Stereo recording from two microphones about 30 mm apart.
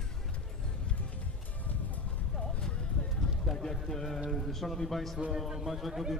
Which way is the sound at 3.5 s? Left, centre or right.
Centre.